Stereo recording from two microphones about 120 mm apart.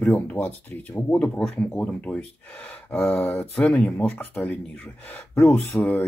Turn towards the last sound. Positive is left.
turn(degrees=15)  # may be behind; listen again after turning